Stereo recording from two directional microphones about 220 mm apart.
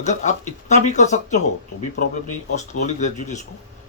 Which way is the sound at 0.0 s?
30° left (ahead or behind).